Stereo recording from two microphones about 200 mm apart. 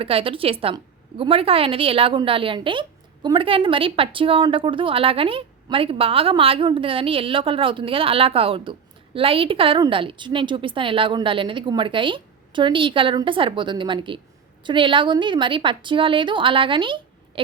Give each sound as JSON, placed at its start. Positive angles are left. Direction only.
{"t": 0.0, "sound": "a woman's voice", "side_deg": -30}